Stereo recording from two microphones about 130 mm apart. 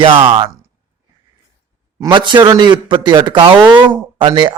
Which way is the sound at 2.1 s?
35° right (ahead or behind).